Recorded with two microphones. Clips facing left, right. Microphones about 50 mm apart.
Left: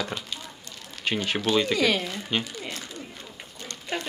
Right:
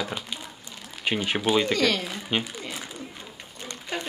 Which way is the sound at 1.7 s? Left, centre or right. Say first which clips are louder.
Even; centre.